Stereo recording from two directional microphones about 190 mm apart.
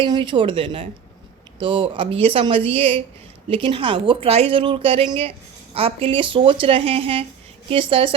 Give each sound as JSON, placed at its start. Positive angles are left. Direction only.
{"t": 0.0, "sound": "a woman's voice", "side_deg": -25}